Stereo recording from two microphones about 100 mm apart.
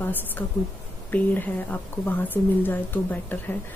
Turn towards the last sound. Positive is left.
turn(degrees=20)  # may be behind; listen again after turning